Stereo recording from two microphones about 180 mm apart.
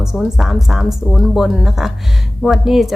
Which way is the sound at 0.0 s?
5° right (ahead or behind).